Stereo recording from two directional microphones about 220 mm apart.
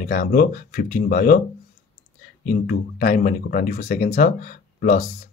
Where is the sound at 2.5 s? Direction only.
40° left (ahead or behind).